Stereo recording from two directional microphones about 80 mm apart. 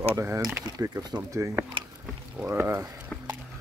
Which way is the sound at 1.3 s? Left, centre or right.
Right.